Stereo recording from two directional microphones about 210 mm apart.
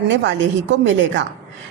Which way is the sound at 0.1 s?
60° right (ahead or behind).